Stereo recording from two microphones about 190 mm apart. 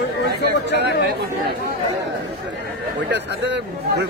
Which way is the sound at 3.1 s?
65° right (ahead or behind).